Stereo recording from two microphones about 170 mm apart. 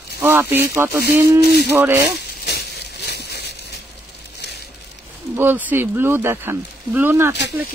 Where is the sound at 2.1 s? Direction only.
70° left (ahead or behind).